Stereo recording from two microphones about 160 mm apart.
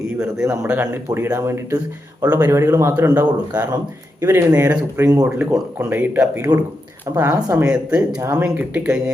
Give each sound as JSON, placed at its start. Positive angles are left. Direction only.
{"t": 0.4, "sound": "speech", "side_deg": -15}
{"t": 7.6, "sound": "speech", "side_deg": -5}